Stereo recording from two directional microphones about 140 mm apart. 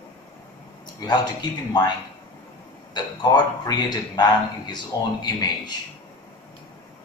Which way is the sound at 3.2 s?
30° left (ahead or behind).